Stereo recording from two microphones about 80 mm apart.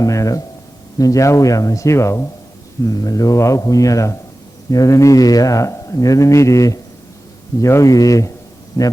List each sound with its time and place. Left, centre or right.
0.0 s a man's voice: left
2.8 s a man's voice: left